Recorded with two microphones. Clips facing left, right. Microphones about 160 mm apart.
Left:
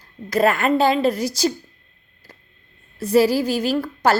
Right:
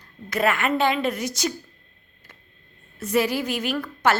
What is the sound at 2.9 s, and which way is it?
A woman's voice, 35° left (ahead or behind).